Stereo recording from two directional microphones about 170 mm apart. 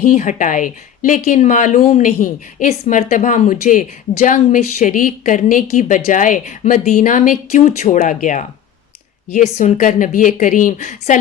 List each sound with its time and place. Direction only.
0.0 s speech: 50° left (ahead or behind)